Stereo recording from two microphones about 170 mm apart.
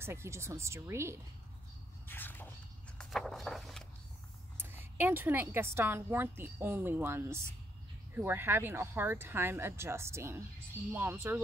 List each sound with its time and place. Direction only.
0.0 s a woman's voice: 15° right (ahead or behind)
2.0 s a sound: 10° left (ahead or behind)
4.6 s a woman's voice: 10° right (ahead or behind)